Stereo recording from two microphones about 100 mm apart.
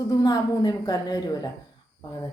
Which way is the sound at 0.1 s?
35° left (ahead or behind).